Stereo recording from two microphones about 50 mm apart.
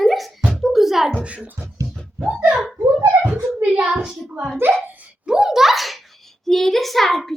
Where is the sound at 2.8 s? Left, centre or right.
Right.